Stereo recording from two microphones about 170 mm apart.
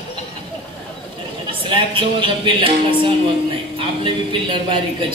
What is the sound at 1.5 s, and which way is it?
Speech, 30° right (ahead or behind).